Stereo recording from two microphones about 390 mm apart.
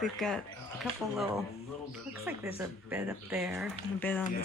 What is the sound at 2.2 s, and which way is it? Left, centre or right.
Speech, centre.